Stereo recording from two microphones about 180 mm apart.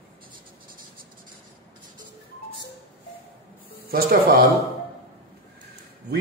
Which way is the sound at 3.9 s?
55° right (ahead or behind).